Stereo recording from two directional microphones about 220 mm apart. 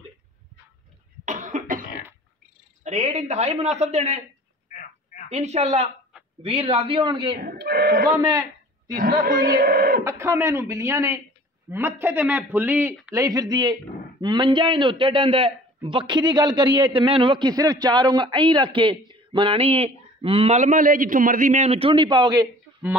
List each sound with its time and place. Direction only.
1.2 s cough: 35° right (ahead or behind)
2.8 s a man's voice: 30° right (ahead or behind)
4.7 s telephone: 35° left (ahead or behind)
5.3 s a man's voice: 30° right (ahead or behind)
7.3 s speech: 45° right (ahead or behind)
8.3 s a sound: 15° right (ahead or behind)
9.2 s speech: 40° right (ahead or behind)
10.0 s a man's voice: 10° right (ahead or behind)